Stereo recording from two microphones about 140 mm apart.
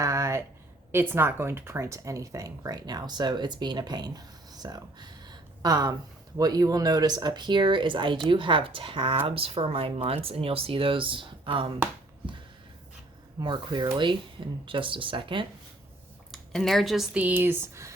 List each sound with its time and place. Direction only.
0.0 s a sound: 20° right (ahead or behind)
0.9 s speech: 15° right (ahead or behind); by 11.7 s 35° right (ahead or behind)
13.4 s speech: 35° right (ahead or behind)
16.3 s speech: 5° left (ahead or behind); by 17.9 s 20° right (ahead or behind)